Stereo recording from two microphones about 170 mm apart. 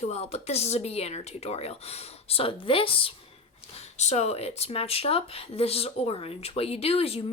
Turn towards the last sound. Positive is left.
turn(degrees=35)  # may be behind; listen again after turning